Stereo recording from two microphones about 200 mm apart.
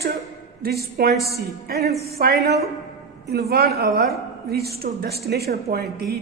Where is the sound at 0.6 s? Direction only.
50° right (ahead or behind).